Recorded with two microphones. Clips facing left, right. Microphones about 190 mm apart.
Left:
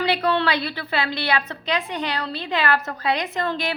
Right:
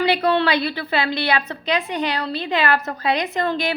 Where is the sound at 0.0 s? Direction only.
15° right (ahead or behind).